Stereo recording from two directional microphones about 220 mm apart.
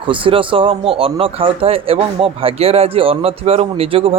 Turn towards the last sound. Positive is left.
turn(degrees=-25)  # may be behind; listen again after turning